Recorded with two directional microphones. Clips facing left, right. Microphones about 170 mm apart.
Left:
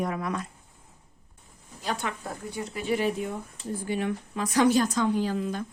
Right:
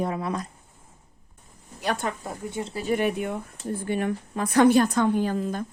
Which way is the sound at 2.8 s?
50° right (ahead or behind).